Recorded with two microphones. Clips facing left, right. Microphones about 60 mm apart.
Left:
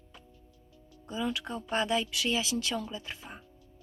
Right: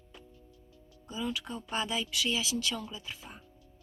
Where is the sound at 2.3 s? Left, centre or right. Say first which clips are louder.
Left 2 dB; left.